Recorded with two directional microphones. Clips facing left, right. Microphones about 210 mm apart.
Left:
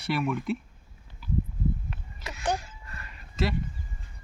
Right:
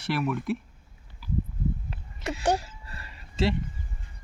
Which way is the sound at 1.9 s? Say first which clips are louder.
Right 8 dB; 30° right (ahead or behind).